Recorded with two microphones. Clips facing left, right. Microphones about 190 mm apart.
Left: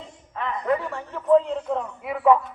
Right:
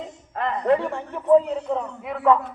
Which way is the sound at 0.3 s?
35° right (ahead or behind).